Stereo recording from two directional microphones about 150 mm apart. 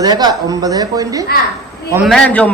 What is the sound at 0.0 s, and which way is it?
A man's voice, 25° right (ahead or behind).